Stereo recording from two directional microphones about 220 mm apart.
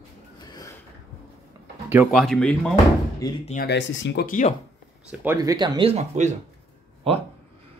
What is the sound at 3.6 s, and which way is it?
Speech, 55° left (ahead or behind).